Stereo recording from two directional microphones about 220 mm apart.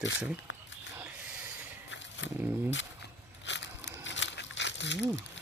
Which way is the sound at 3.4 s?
55° left (ahead or behind).